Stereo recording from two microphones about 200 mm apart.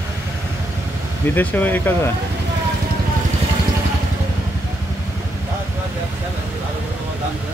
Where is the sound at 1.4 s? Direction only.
10° left (ahead or behind).